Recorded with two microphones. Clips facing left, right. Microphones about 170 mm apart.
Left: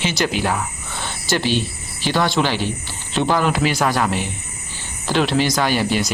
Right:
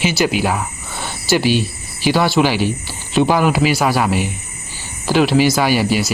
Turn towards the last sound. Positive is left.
turn(degrees=-5)  # may be behind; listen again after turning